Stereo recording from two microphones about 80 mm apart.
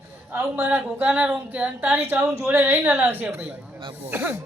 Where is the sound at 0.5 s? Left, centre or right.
Right.